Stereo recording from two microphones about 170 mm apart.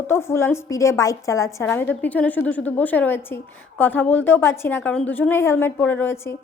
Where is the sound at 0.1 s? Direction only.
15° left (ahead or behind).